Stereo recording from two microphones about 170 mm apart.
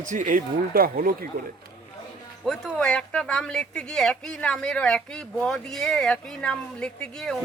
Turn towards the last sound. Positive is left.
turn(degrees=5)  # may be behind; listen again after turning